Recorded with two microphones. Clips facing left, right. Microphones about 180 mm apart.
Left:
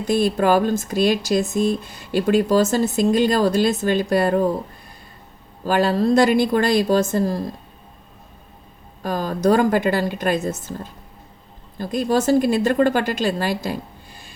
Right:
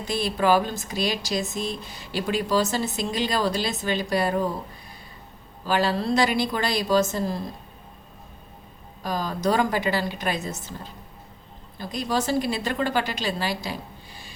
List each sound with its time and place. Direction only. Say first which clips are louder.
0.0 s speech: left 6 dB; 50° left (ahead or behind)
5.6 s speech: left 6 dB; 45° left (ahead or behind)
9.0 s speech: left 6 dB; 50° left (ahead or behind)